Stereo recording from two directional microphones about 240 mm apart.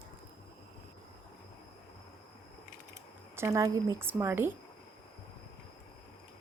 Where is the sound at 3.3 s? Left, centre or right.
Centre.